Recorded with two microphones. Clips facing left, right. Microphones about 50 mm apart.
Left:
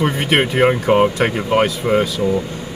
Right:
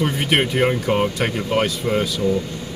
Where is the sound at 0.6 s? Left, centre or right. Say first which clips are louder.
Left 5 dB; centre.